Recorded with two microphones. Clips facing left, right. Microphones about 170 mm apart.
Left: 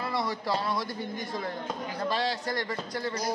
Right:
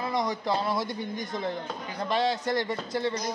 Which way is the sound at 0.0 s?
20° right (ahead or behind).